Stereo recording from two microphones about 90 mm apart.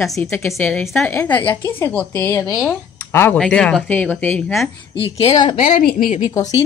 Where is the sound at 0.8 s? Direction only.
5° left (ahead or behind).